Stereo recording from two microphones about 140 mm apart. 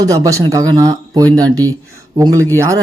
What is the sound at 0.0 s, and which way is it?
Speech, 25° right (ahead or behind).